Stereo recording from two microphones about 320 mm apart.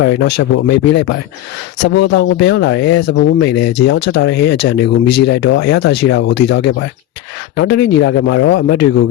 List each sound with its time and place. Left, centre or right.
0.0 s speech: left